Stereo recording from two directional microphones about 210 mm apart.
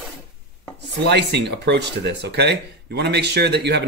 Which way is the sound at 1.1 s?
55° right (ahead or behind).